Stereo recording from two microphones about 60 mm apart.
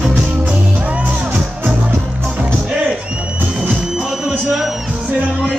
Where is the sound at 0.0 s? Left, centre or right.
Right.